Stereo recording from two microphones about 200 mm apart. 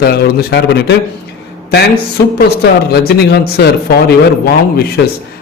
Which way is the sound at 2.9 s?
55° left (ahead or behind).